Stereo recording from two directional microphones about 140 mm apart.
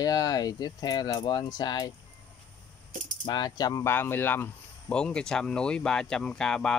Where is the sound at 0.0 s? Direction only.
25° left (ahead or behind).